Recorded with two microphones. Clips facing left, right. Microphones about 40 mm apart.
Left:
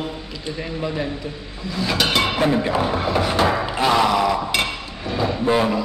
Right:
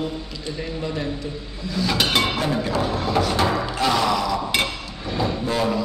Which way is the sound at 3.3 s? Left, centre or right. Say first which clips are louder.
Left 2 dB; left.